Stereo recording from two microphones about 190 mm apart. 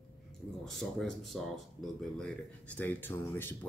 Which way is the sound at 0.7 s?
Centre (ahead or behind).